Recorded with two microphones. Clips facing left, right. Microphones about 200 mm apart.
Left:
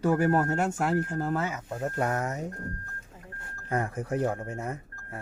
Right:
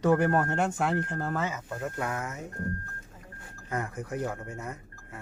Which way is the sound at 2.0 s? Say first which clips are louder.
Left 5 dB; 40° left (ahead or behind).